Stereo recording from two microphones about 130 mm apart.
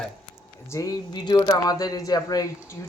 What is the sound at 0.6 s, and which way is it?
Speech, 25° left (ahead or behind).